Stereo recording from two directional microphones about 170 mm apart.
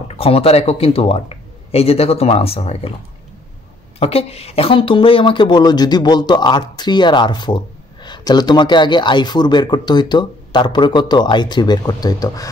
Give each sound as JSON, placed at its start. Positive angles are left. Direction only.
{"t": 0.1, "sound": "speech", "side_deg": 35}
{"t": 4.0, "sound": "speech", "side_deg": 35}